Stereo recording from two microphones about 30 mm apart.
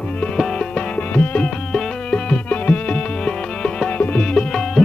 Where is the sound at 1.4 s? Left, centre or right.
Left.